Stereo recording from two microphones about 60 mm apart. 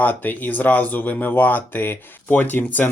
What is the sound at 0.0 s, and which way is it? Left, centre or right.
Speech, left.